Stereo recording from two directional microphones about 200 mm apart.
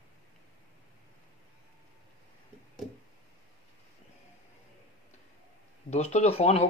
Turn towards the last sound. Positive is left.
turn(degrees=30)  # may be behind; listen again after turning